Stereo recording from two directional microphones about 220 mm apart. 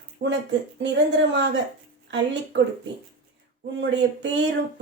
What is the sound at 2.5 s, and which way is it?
Speech, 55° right (ahead or behind).